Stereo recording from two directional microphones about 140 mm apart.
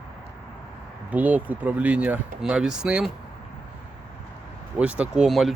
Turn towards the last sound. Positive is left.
turn(degrees=0)  # may be behind; listen again after turning